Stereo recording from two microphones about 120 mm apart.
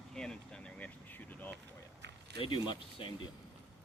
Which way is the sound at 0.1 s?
5° left (ahead or behind).